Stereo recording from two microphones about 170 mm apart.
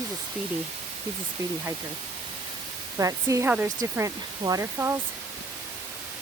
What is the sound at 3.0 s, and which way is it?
Speech, 20° right (ahead or behind).